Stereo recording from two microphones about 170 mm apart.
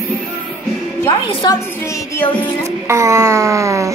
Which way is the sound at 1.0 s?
20° left (ahead or behind).